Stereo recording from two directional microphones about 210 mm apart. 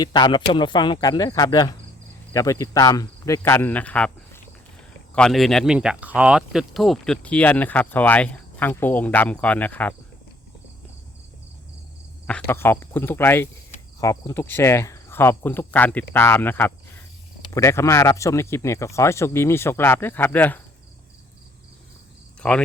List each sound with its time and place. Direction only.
0.0 s speech: 20° left (ahead or behind)
12.3 s speech: 10° left (ahead or behind)
22.4 s speech: 5° left (ahead or behind)